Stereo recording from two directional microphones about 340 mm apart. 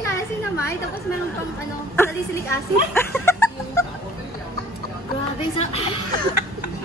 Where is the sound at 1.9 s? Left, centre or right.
Centre.